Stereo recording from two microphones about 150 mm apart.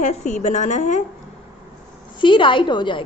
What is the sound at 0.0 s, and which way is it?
A woman's voice, 55° left (ahead or behind).